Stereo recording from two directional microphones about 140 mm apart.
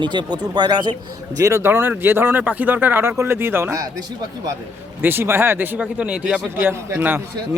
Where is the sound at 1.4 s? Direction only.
20° right (ahead or behind).